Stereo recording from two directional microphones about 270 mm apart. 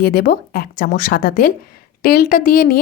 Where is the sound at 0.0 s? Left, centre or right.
Left.